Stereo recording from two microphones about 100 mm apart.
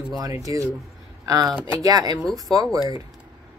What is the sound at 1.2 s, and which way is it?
Speech, 35° right (ahead or behind).